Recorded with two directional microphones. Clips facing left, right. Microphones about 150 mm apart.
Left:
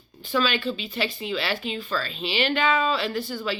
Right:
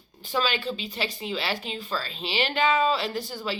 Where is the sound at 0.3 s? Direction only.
35° right (ahead or behind).